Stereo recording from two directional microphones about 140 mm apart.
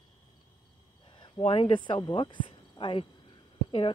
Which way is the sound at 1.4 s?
40° left (ahead or behind).